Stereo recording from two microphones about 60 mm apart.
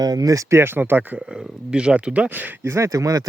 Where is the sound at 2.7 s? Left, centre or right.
Right.